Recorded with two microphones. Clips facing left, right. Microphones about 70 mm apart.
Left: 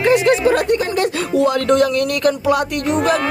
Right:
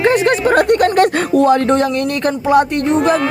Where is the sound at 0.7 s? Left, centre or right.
Right.